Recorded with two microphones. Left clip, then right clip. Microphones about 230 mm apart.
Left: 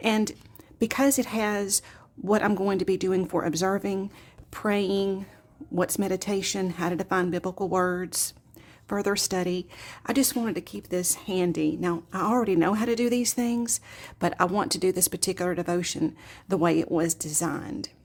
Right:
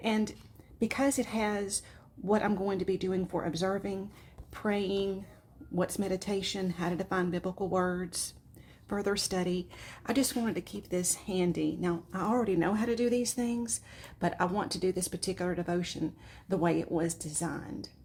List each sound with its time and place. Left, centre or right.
0.0 s a woman's voice: left